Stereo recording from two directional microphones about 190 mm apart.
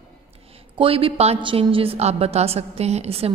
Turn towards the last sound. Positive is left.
turn(degrees=-35)  # may be behind; listen again after turning